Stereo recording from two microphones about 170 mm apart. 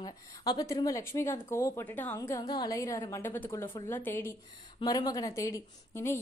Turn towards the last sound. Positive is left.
turn(degrees=15)  # may be behind; listen again after turning